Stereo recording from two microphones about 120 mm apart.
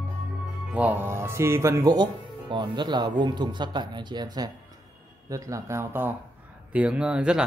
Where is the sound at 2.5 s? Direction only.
40° right (ahead or behind).